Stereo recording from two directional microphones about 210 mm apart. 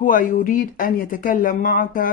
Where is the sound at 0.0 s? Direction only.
40° left (ahead or behind).